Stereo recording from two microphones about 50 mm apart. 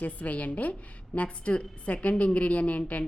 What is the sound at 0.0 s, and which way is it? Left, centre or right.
A woman's voice, left.